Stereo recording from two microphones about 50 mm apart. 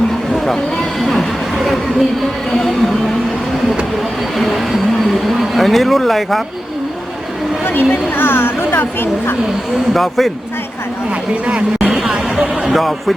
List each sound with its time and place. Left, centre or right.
0.4 s speech: centre
4.4 s speech: centre
7.6 s a woman's voice: left
9.9 s speech: centre
11.4 s speech: right
11.9 s speech: centre